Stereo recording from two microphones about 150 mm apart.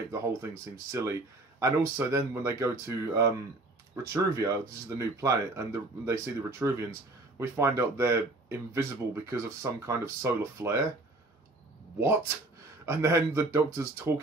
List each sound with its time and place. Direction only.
0.1 s speech: 20° right (ahead or behind)
12.8 s speech: 20° right (ahead or behind)